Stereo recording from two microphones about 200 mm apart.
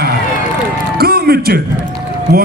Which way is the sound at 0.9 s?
50° right (ahead or behind).